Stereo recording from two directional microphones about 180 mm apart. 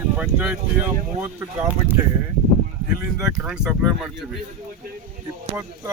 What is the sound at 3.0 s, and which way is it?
Speech, 15° right (ahead or behind).